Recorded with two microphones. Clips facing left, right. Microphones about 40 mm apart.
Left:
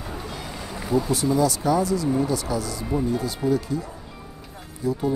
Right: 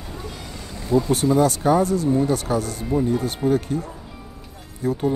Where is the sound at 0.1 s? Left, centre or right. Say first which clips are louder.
Right 1 dB; centre.